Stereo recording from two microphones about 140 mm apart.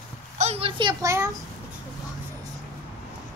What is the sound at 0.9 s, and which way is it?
Speech, 20° right (ahead or behind).